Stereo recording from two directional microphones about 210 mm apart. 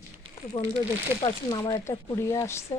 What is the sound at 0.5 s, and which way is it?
Speech, 25° left (ahead or behind).